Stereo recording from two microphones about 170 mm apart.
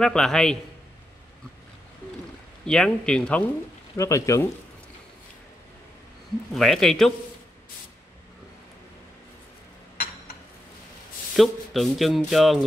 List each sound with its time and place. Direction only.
0.0 s speech: 5° left (ahead or behind)
2.6 s speech: 5° left (ahead or behind)
3.9 s speech: 20° left (ahead or behind)
6.5 s speech: centre (ahead or behind)
11.3 s speech: centre (ahead or behind)